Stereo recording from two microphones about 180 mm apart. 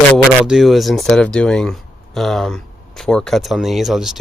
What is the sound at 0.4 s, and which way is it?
Speech, centre (ahead or behind).